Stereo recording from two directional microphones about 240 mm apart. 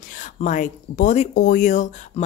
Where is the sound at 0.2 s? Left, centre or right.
Left.